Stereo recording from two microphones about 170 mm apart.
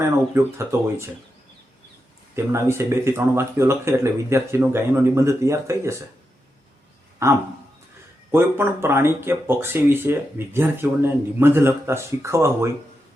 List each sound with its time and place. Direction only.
0.0 s speech: 15° right (ahead or behind)
2.3 s speech: 15° right (ahead or behind)
8.3 s speech: 15° right (ahead or behind)